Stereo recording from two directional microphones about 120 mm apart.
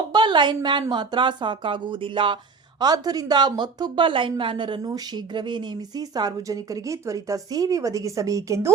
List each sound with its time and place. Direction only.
0.1 s speech: 40° right (ahead or behind)